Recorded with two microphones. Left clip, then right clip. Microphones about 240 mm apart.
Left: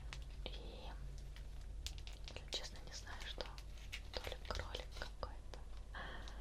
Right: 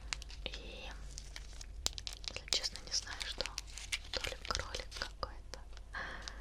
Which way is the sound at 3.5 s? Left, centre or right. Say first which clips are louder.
Right 12 dB; right.